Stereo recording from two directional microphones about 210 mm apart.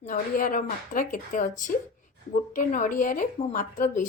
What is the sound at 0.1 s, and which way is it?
A woman's voice, 40° left (ahead or behind).